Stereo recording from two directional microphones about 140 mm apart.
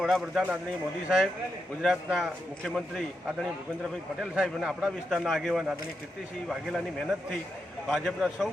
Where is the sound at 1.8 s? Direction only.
Centre (ahead or behind).